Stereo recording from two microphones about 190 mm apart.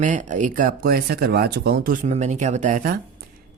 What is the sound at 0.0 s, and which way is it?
Speech, 40° right (ahead or behind).